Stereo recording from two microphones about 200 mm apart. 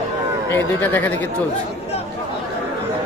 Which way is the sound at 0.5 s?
10° left (ahead or behind).